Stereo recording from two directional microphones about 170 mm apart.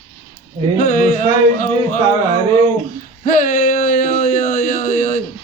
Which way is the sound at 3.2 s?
50° left (ahead or behind).